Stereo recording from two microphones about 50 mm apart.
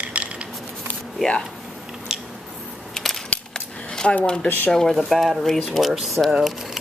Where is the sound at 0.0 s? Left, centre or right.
Right.